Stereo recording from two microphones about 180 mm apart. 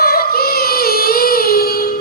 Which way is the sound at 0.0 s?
55° left (ahead or behind).